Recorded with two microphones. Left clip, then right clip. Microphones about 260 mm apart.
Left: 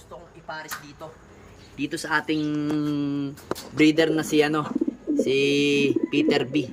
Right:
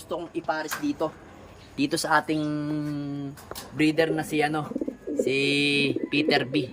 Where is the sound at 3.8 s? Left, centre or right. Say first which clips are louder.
Left 4 dB; centre.